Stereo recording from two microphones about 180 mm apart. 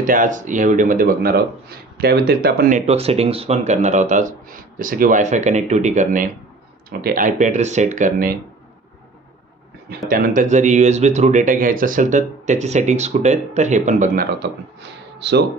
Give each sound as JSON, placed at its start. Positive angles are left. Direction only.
{"t": 0.0, "sound": "speech", "side_deg": -50}
{"t": 2.9, "sound": "speech", "side_deg": -35}
{"t": 6.9, "sound": "speech", "side_deg": -55}
{"t": 10.0, "sound": "speech", "side_deg": -55}
{"t": 14.4, "sound": "speech", "side_deg": -75}